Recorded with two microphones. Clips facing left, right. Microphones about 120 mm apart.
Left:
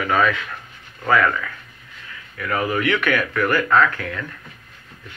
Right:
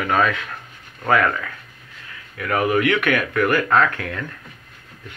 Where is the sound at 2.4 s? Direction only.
60° right (ahead or behind).